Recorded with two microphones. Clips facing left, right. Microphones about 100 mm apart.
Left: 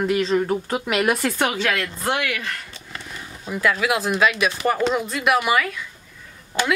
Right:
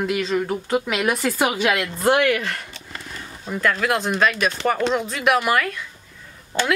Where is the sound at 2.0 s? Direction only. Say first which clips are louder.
Right 8 dB; 40° right (ahead or behind).